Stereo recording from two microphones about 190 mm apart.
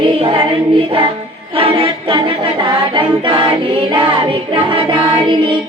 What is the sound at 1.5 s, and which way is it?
Music, 25° right (ahead or behind).